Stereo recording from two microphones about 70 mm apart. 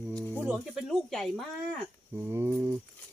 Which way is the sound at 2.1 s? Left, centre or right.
Right.